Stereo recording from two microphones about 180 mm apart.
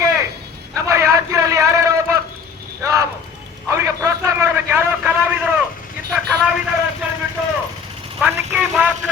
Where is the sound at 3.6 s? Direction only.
15° right (ahead or behind).